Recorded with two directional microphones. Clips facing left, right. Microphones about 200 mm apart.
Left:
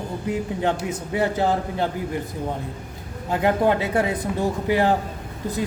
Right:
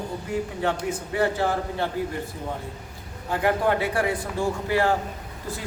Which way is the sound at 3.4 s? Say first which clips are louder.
Left 3 dB; 20° left (ahead or behind).